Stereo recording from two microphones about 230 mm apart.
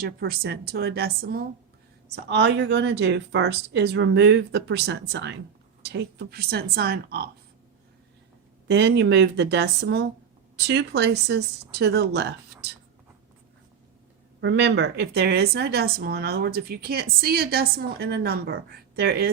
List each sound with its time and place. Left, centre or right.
0.0 s speech: right
8.6 s speech: right
14.4 s speech: right